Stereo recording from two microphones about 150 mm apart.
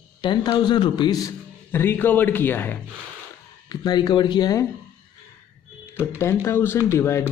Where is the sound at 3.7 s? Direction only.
30° left (ahead or behind).